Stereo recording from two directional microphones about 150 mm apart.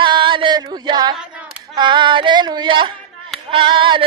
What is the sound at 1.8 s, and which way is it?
A man's voice, 30° right (ahead or behind).